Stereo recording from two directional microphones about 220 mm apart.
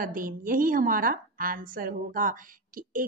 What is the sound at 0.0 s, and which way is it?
A woman's voice, 40° right (ahead or behind).